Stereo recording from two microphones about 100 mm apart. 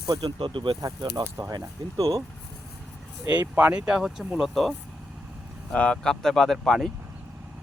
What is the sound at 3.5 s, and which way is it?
Speech, 15° right (ahead or behind).